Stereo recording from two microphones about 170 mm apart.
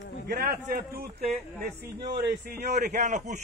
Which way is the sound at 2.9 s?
45° right (ahead or behind).